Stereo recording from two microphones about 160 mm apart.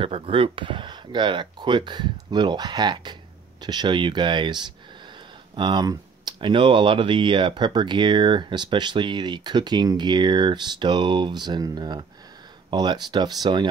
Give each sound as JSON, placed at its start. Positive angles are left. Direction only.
{"t": 0.0, "sound": "speech", "side_deg": -35}